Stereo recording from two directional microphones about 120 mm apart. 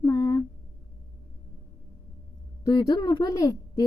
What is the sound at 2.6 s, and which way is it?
Speech, 35° left (ahead or behind).